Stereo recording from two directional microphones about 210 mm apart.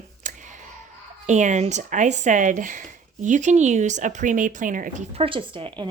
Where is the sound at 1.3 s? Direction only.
35° right (ahead or behind).